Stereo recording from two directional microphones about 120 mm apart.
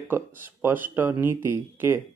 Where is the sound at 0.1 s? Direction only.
15° right (ahead or behind).